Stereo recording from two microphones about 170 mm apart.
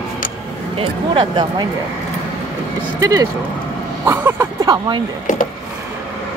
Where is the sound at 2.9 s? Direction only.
20° right (ahead or behind).